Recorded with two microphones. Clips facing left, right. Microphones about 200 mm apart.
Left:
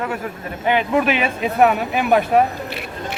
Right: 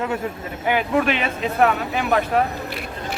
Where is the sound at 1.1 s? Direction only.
10° left (ahead or behind).